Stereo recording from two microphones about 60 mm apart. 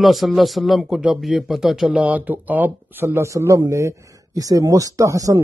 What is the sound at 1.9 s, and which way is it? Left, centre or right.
Speech, right.